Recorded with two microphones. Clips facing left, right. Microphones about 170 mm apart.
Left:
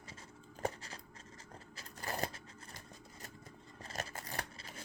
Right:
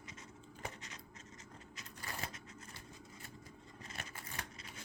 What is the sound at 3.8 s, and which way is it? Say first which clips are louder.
Scissors: left 7 dB; 40° left (ahead or behind).